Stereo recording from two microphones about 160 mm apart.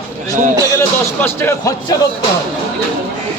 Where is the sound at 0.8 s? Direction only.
15° left (ahead or behind).